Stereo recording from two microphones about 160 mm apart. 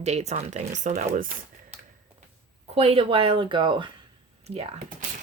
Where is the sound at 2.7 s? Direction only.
40° right (ahead or behind).